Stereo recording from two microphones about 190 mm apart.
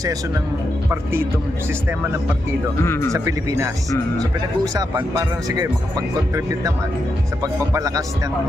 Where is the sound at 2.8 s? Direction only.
15° left (ahead or behind).